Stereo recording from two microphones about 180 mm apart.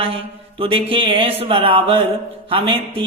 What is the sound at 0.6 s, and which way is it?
Speech, 30° right (ahead or behind).